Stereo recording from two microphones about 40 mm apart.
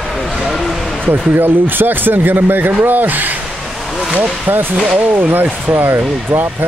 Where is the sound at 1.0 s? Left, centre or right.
Right.